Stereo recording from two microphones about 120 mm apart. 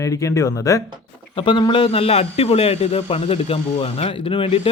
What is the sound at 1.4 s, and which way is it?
A man's voice, 40° left (ahead or behind).